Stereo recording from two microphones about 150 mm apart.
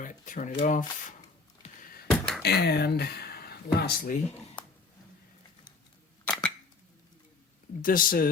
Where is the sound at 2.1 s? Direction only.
5° left (ahead or behind).